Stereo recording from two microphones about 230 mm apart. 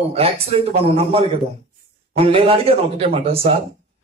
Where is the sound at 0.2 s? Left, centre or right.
Right.